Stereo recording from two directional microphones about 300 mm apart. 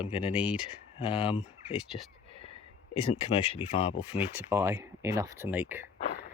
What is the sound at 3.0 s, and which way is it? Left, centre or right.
Speech, centre.